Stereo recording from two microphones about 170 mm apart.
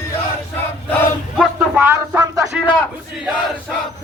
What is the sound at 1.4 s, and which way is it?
Speech, 10° right (ahead or behind).